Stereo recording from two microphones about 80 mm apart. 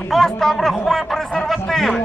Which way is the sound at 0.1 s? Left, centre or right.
Centre.